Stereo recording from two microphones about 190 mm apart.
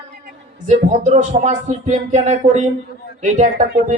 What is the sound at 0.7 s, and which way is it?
Speech, 40° right (ahead or behind).